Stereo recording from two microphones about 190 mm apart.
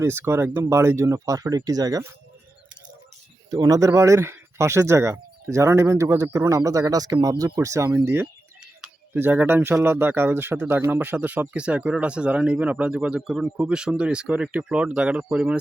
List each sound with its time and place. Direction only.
0.0 s speech: 15° right (ahead or behind)
3.5 s speech: 20° right (ahead or behind)